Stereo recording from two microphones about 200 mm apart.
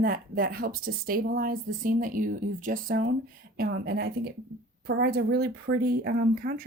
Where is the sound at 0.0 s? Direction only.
50° right (ahead or behind).